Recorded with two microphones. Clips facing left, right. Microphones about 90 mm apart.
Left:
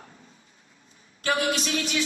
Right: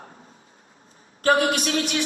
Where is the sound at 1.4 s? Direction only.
60° right (ahead or behind).